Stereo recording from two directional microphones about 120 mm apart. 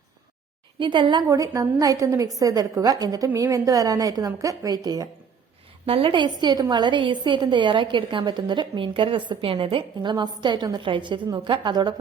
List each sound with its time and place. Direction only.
0.8 s a woman's voice: 45° right (ahead or behind)
1.3 s a woman's voice: 30° right (ahead or behind)
5.8 s a woman's voice: 50° right (ahead or behind)